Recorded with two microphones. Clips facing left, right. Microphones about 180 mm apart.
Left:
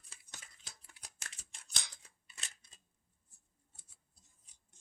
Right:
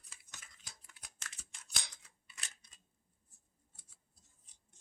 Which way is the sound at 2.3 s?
35° left (ahead or behind).